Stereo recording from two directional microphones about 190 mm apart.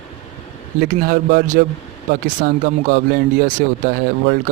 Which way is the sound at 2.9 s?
50° right (ahead or behind).